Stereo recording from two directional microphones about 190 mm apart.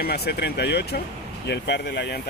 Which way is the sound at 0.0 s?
55° left (ahead or behind).